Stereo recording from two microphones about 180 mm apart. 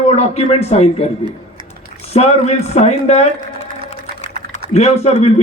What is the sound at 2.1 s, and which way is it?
A man's voice, 40° left (ahead or behind).